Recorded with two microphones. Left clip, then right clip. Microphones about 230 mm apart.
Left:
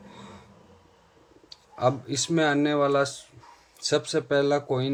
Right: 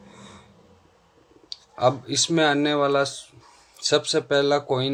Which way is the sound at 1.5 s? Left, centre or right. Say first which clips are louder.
Right 4 dB; right.